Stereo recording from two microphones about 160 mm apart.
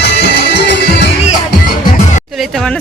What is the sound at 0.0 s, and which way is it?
Music, 90° left.